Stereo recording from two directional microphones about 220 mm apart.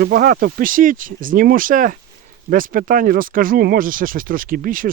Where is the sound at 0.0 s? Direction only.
40° right (ahead or behind).